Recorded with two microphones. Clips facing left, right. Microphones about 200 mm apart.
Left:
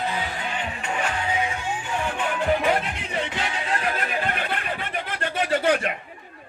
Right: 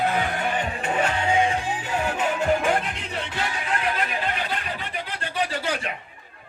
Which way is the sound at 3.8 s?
50° left (ahead or behind).